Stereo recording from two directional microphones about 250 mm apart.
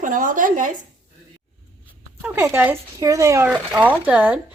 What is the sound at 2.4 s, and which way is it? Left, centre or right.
A woman's voice, centre.